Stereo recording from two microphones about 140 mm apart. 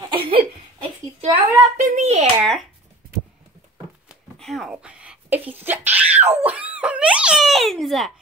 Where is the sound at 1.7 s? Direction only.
60° right (ahead or behind).